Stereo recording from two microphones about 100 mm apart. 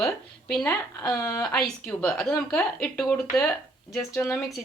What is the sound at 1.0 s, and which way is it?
Speech, 30° left (ahead or behind).